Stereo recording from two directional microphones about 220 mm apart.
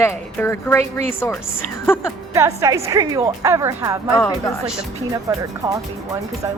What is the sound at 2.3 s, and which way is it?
Speech, 15° right (ahead or behind).